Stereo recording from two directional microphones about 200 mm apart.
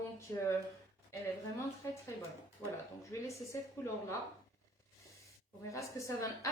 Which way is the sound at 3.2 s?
15° left (ahead or behind).